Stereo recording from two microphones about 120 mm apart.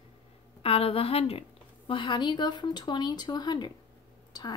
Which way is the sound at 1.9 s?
40° left (ahead or behind).